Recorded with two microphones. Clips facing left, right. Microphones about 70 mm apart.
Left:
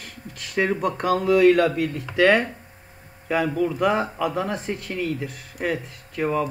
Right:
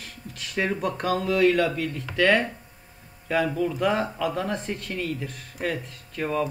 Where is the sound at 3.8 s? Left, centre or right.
Centre.